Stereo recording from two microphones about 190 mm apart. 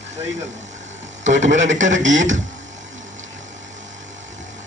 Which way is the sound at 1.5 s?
40° right (ahead or behind).